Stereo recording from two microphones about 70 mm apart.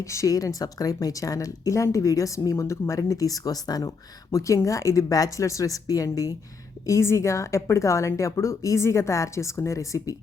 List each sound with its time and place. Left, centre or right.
0.0 s a woman's voice: left
3.0 s speech: left
6.8 s a woman's voice: left